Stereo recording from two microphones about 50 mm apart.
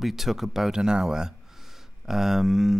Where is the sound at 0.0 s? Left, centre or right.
Centre.